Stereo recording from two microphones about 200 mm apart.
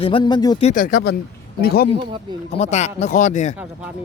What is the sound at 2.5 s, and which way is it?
Speech, 35° left (ahead or behind).